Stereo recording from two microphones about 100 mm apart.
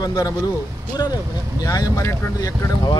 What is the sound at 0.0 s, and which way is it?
Speech, 40° left (ahead or behind).